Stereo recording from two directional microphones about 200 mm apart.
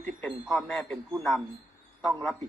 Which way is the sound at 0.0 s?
10° left (ahead or behind).